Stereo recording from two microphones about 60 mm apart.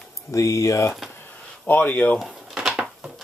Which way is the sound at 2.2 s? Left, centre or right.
Centre.